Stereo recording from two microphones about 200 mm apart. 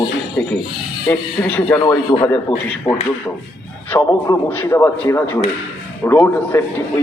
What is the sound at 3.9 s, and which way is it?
Speech, 15° left (ahead or behind).